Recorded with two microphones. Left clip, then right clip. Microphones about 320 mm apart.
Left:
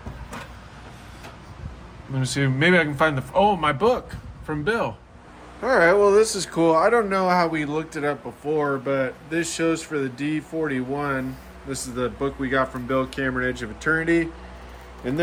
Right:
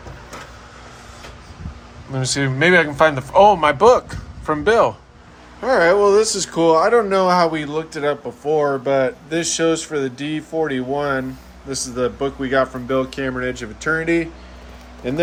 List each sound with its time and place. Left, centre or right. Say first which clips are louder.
2.2 s a man's voice: right 4 dB; centre
5.6 s speech: right 3 dB; centre